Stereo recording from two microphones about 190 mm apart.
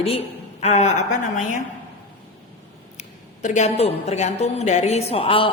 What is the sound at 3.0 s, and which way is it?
A woman's voice, 40° left (ahead or behind).